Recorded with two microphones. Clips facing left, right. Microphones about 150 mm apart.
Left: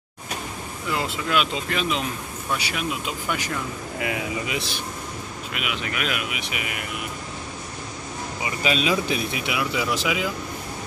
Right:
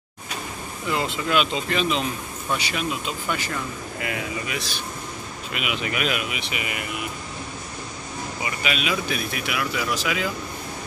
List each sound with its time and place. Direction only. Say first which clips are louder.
0.8 s speech: right 2 dB; 5° left (ahead or behind); by 4.6 s 20° left (ahead or behind)
5.5 s speech: right 3 dB; 5° right (ahead or behind)
8.6 s speech: left 4 dB; 30° left (ahead or behind); by 10.3 s 10° left (ahead or behind)